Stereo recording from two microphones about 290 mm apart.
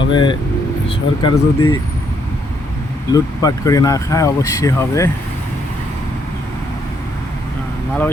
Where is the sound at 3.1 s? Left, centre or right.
Centre.